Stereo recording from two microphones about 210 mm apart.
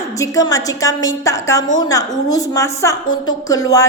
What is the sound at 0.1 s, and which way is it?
A woman's voice, 15° left (ahead or behind).